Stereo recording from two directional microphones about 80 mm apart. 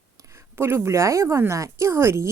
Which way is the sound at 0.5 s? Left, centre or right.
Right.